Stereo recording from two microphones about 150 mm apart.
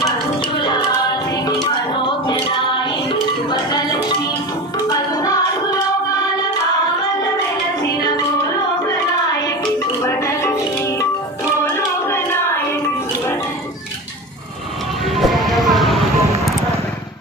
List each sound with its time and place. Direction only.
0.4 s music: 30° left (ahead or behind)
10.0 s music: 20° left (ahead or behind)
11.6 s a sound: 15° left (ahead or behind)
15.0 s music: centre (ahead or behind)